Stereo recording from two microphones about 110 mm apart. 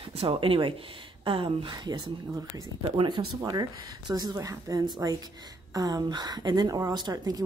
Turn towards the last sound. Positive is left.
turn(degrees=-35)  # may be behind; listen again after turning